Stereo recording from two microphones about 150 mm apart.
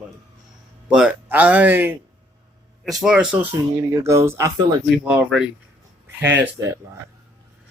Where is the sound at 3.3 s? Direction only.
20° right (ahead or behind).